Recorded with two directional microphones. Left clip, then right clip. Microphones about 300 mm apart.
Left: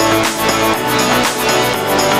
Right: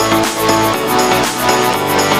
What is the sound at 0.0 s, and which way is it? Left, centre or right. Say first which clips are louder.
Music: even; centre.